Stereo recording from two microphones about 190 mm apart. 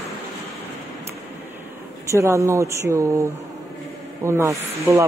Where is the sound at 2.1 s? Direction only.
15° right (ahead or behind).